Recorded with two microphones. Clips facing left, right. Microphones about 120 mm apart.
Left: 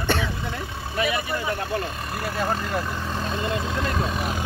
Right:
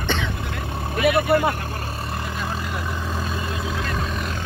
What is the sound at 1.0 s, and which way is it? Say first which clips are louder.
Vehicle: right 12 dB; 55° right (ahead or behind).